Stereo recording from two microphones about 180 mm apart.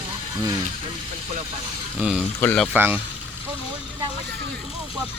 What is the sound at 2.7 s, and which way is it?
Speech, 10° right (ahead or behind).